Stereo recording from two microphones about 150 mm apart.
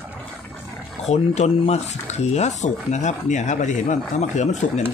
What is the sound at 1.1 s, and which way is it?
Speech, 50° left (ahead or behind).